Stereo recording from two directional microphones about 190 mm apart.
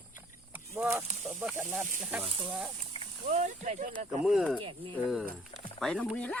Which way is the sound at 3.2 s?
35° right (ahead or behind).